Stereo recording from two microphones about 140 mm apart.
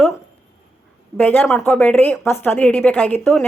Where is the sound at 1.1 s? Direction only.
15° left (ahead or behind).